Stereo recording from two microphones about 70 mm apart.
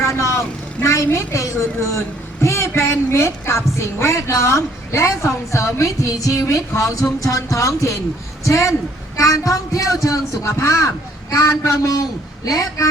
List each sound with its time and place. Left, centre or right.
0.1 s vehicle: left
1.0 s a woman's voice: left